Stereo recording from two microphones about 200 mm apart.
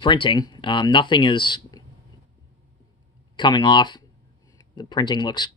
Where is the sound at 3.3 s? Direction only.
20° left (ahead or behind).